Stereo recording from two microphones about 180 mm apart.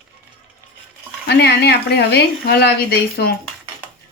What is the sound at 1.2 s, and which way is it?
A woman's voice, 65° left (ahead or behind).